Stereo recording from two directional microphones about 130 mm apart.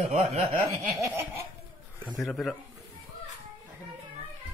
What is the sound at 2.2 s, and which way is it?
Speech, centre (ahead or behind).